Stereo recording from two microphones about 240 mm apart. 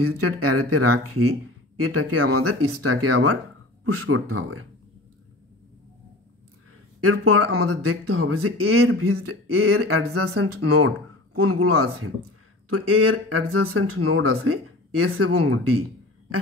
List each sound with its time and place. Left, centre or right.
0.0 s speech: right
7.0 s speech: right